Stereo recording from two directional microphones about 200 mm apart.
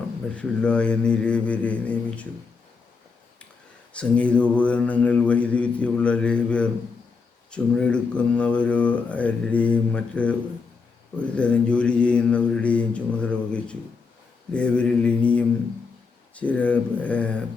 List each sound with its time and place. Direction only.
0.3 s speech: 5° left (ahead or behind)
3.9 s mantra: 5° left (ahead or behind)
7.5 s speech: 5° left (ahead or behind)
16.3 s mantra: 5° left (ahead or behind)